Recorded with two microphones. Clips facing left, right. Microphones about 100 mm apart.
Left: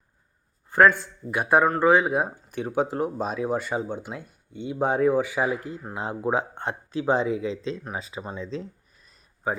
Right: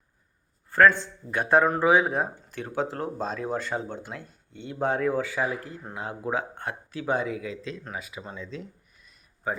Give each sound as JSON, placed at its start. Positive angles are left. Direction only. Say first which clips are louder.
{"t": 0.7, "sound": "speech", "louder": "left 1 dB", "side_deg": 15}
{"t": 1.6, "sound": "speech", "louder": "left 2 dB", "side_deg": -5}
{"t": 8.4, "sound": "a sound", "louder": "left 5 dB", "side_deg": 30}
{"t": 9.5, "sound": "a man's voice", "louder": "left 3 dB", "side_deg": 15}